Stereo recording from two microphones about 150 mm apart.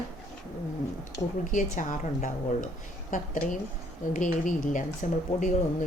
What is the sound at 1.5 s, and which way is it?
Speech, 60° left (ahead or behind).